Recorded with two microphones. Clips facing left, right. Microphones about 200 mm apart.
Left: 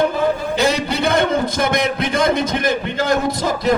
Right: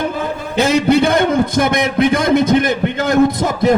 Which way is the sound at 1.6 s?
55° right (ahead or behind).